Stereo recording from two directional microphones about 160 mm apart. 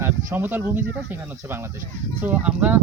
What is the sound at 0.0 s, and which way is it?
Speech, 15° right (ahead or behind).